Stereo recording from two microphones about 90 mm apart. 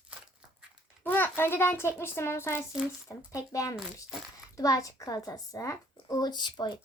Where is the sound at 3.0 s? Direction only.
40° left (ahead or behind).